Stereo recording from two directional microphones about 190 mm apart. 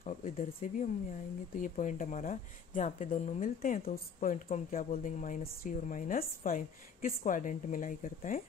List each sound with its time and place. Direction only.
0.0 s speech: 40° left (ahead or behind)